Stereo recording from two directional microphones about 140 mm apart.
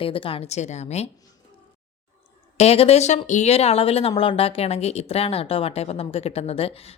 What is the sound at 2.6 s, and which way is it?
Speech, 45° left (ahead or behind).